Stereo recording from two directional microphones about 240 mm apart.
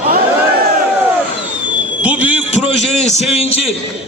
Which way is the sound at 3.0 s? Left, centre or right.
Left.